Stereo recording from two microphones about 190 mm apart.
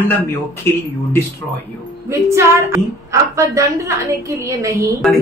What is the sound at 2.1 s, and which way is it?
A woman's voice, 15° right (ahead or behind).